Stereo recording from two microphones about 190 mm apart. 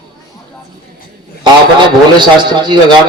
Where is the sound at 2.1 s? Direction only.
25° right (ahead or behind).